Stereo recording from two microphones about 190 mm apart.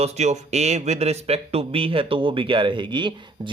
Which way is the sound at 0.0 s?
35° right (ahead or behind).